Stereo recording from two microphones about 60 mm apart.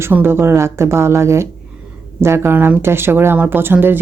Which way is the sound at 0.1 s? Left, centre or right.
Right.